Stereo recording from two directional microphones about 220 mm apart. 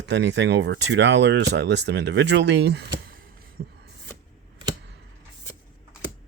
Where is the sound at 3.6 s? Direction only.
40° right (ahead or behind).